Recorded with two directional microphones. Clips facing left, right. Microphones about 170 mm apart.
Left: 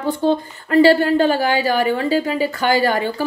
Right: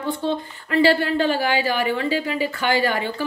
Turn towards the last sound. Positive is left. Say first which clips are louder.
# left 4 dB
turn(degrees=40)  # may be behind; listen again after turning